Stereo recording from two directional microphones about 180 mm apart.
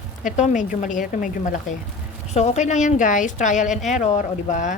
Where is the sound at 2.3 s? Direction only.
35° left (ahead or behind).